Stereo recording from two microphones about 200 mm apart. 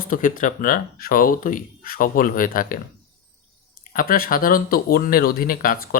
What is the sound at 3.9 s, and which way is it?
Speech, 45° left (ahead or behind).